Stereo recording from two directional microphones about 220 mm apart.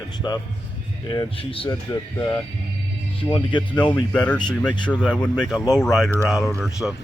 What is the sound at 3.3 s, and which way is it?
Speech, 20° left (ahead or behind).